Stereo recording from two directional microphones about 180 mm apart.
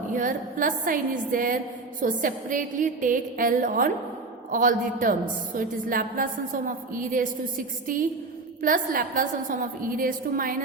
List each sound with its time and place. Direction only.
0.1 s a woman's voice: 45° right (ahead or behind)